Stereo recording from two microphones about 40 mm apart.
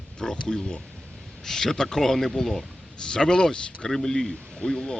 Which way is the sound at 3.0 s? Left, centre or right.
Centre.